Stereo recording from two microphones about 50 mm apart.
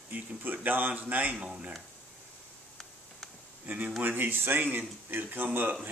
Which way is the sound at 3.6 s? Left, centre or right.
Right.